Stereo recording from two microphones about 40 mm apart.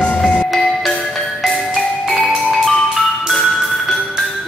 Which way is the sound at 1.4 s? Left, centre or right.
Centre.